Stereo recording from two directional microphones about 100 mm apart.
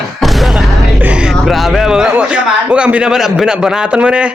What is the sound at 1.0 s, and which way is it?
Speech, 15° right (ahead or behind).